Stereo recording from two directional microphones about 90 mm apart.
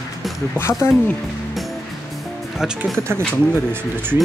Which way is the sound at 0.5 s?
30° left (ahead or behind).